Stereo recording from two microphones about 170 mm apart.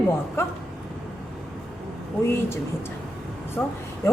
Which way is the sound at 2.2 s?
15° left (ahead or behind).